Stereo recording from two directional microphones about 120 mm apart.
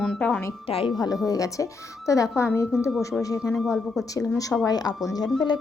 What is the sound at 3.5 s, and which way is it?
Speech, centre (ahead or behind).